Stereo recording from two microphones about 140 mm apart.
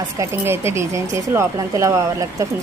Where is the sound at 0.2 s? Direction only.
20° right (ahead or behind).